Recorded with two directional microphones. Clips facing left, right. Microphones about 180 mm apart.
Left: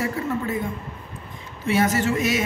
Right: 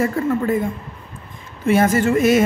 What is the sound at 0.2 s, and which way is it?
Speech, 50° right (ahead or behind).